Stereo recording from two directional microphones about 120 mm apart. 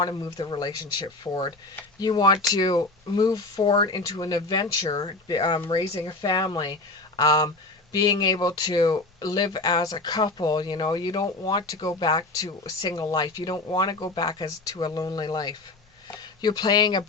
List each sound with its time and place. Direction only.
0.0 s speech: 35° left (ahead or behind)